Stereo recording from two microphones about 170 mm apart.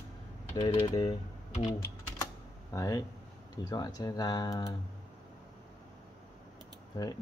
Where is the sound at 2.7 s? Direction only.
20° left (ahead or behind).